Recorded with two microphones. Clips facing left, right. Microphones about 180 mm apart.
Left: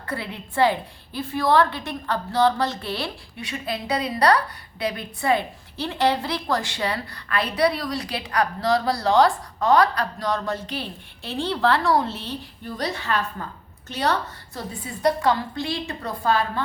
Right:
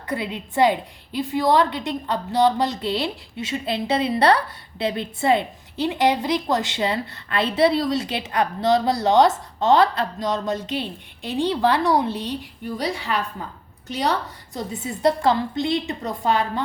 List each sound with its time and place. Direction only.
0.1 s a woman's voice: 20° right (ahead or behind)